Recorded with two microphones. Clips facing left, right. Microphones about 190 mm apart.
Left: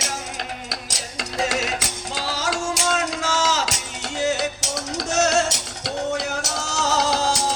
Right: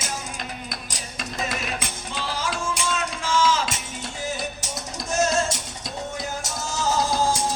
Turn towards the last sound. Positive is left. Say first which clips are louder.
# left 1 dB
turn(degrees=75)  # may be behind; listen again after turning